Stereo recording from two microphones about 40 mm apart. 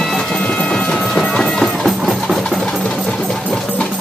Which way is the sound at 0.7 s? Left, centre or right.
Centre.